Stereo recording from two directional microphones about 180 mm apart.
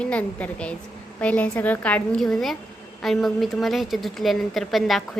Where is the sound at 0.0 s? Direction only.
5° left (ahead or behind).